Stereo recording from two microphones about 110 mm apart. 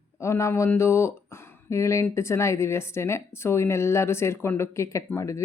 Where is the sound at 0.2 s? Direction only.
25° left (ahead or behind).